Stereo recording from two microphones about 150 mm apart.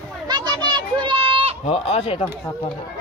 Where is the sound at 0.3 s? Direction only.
30° right (ahead or behind).